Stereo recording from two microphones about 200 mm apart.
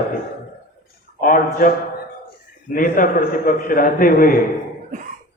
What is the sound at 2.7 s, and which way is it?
A man's voice, 45° left (ahead or behind).